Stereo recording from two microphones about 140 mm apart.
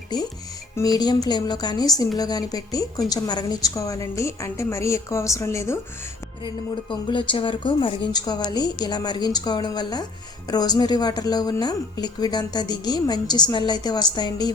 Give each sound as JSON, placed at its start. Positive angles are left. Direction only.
{"t": 0.8, "sound": "a woman's voice", "side_deg": 30}
{"t": 6.9, "sound": "a woman's voice", "side_deg": 35}